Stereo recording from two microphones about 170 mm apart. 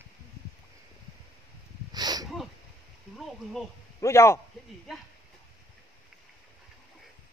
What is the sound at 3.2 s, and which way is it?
Speech, centre (ahead or behind).